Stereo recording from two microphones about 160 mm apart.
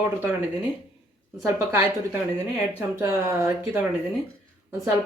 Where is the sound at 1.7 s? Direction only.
15° right (ahead or behind).